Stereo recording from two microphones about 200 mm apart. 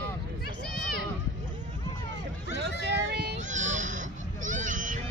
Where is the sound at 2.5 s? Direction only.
60° right (ahead or behind).